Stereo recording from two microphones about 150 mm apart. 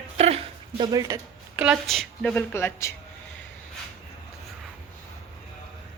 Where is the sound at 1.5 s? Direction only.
5° right (ahead or behind); by 2.9 s 15° left (ahead or behind).